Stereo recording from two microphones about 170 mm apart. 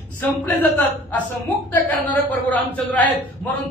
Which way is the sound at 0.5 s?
10° left (ahead or behind).